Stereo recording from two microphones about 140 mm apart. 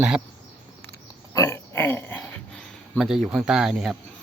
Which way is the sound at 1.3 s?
20° left (ahead or behind).